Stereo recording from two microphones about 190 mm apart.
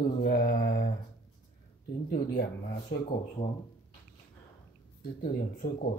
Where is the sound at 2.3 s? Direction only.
60° left (ahead or behind).